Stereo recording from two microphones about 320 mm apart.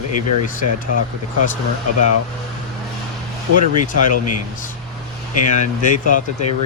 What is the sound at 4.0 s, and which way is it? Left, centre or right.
Speech, left.